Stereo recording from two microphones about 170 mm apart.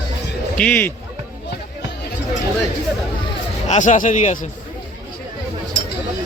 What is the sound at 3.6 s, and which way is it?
Speech, 45° left (ahead or behind).